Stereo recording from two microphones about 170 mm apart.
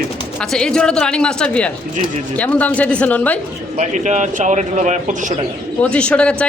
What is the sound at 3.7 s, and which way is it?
A man's voice, 45° right (ahead or behind).